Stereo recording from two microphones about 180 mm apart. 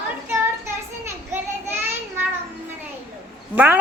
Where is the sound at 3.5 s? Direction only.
10° right (ahead or behind).